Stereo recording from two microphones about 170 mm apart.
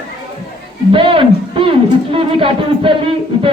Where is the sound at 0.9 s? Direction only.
30° right (ahead or behind).